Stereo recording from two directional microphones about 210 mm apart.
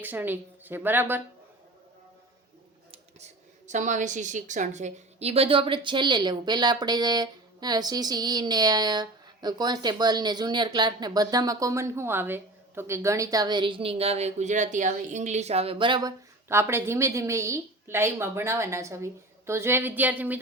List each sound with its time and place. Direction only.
0.0 s a woman's voice: 10° right (ahead or behind)
3.7 s a woman's voice: 35° right (ahead or behind); by 20.4 s 5° right (ahead or behind)